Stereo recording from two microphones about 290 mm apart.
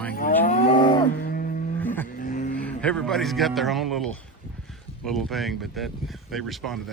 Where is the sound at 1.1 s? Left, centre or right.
Left.